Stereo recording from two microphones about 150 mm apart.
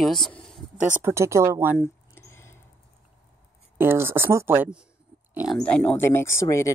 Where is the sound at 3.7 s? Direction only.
15° right (ahead or behind).